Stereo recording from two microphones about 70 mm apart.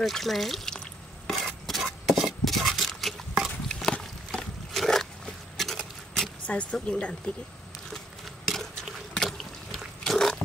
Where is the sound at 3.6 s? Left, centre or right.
Centre.